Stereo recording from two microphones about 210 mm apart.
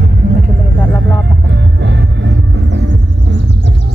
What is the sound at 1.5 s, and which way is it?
Music, 55° right (ahead or behind).